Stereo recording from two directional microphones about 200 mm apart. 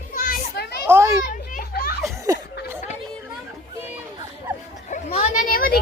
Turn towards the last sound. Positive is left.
turn(degrees=45)  # may be behind; listen again after turning